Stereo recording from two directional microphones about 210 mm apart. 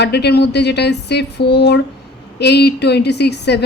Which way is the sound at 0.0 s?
50° left (ahead or behind).